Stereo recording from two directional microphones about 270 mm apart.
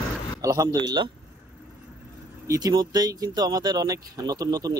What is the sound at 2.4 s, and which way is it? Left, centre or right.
Speech, centre.